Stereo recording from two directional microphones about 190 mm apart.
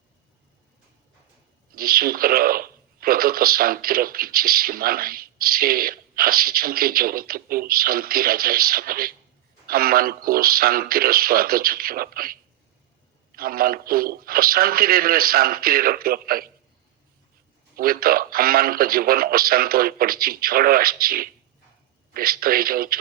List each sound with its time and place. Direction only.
1.7 s speech: 50° right (ahead or behind)
17.7 s speech: 50° right (ahead or behind)